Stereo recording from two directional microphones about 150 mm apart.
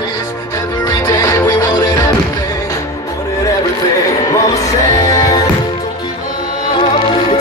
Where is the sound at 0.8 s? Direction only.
25° left (ahead or behind).